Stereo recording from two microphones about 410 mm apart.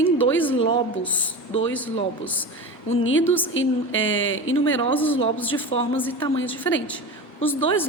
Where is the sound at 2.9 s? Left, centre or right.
Left.